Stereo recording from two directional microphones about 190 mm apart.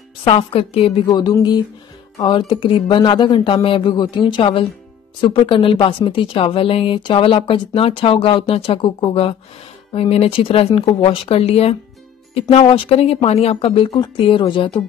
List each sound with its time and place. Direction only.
0.3 s speech: 30° left (ahead or behind)
1.1 s speech: 20° left (ahead or behind)